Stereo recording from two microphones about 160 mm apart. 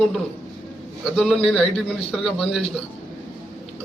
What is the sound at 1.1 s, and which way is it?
A man's voice, centre (ahead or behind).